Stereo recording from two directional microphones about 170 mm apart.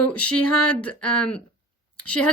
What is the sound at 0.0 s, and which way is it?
Speech, 5° left (ahead or behind).